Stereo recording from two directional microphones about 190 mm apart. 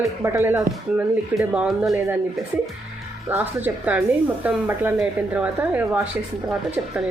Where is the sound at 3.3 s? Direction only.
10° right (ahead or behind).